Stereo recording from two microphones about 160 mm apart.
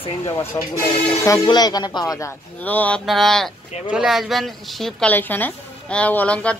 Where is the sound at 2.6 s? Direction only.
10° left (ahead or behind).